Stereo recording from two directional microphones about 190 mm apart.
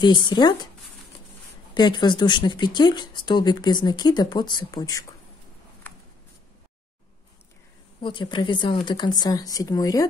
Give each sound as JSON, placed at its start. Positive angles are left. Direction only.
{"t": 0.0, "sound": "speech", "side_deg": 25}
{"t": 1.7, "sound": "speech", "side_deg": 25}
{"t": 8.0, "sound": "speech", "side_deg": 25}